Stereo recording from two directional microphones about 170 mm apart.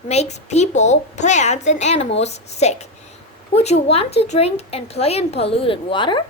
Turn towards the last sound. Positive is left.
turn(degrees=30)  # may be behind; listen again after turning